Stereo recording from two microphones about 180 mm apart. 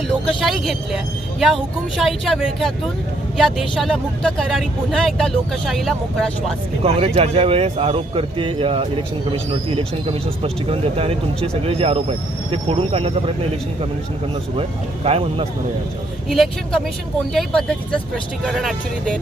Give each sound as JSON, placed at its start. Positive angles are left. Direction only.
{"t": 0.3, "sound": "speech", "side_deg": 0}
{"t": 6.8, "sound": "speech", "side_deg": -35}
{"t": 14.5, "sound": "speech", "side_deg": -35}
{"t": 16.3, "sound": "speech", "side_deg": 0}